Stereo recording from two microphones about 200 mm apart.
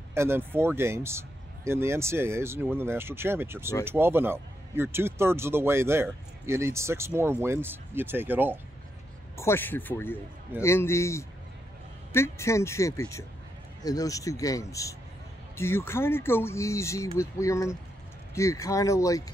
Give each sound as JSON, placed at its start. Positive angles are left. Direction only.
{"t": 0.1, "sound": "speech", "side_deg": -10}
{"t": 9.4, "sound": "speech", "side_deg": 10}